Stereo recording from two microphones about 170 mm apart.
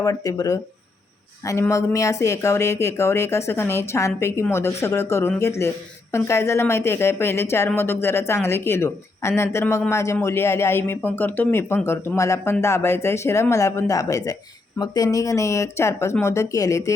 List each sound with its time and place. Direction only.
0.0 s speech: 20° left (ahead or behind)